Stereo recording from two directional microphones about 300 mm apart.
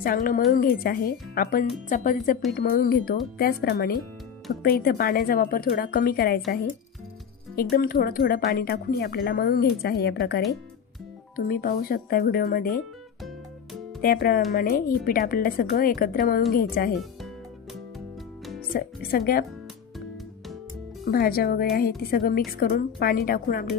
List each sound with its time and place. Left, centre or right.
0.0 s speech: left
7.5 s speech: left
14.0 s speech: left
18.7 s speech: left
21.1 s speech: left